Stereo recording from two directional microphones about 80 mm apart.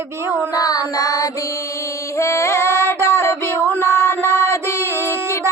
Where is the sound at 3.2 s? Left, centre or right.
Left.